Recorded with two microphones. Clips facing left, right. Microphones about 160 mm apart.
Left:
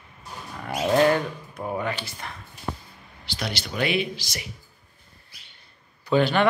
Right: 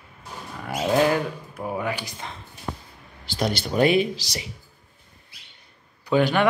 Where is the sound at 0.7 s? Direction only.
5° right (ahead or behind).